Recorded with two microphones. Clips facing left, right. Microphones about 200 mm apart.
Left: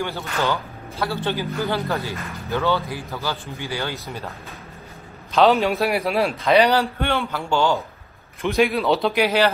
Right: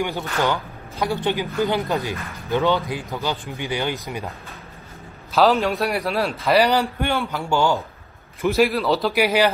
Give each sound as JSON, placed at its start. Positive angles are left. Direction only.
{"t": 0.0, "sound": "a man's voice", "side_deg": -15}
{"t": 5.3, "sound": "a man's voice", "side_deg": 0}
{"t": 6.7, "sound": "a man's voice", "side_deg": -15}
{"t": 9.2, "sound": "a man's voice", "side_deg": -10}